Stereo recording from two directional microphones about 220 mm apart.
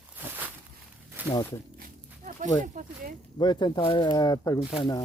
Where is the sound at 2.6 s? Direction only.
35° right (ahead or behind).